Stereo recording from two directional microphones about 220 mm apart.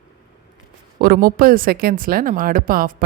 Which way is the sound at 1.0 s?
40° right (ahead or behind).